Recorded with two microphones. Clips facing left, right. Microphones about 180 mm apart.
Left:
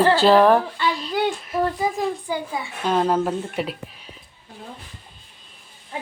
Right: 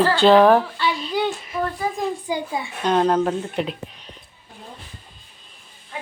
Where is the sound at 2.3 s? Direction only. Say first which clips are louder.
Right 1 dB; 15° right (ahead or behind).